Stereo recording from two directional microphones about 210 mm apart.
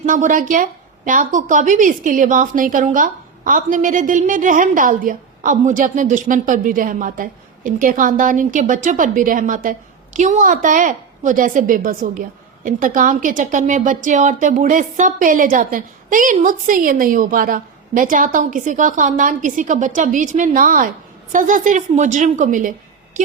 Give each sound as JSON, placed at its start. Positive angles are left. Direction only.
{"t": 0.0, "sound": "a woman's voice", "side_deg": -40}